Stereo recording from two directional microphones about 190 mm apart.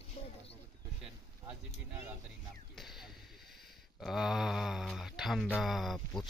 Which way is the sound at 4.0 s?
Centre (ahead or behind).